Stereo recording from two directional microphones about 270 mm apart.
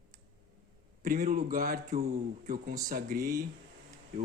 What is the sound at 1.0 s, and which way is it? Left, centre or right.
Speech, right.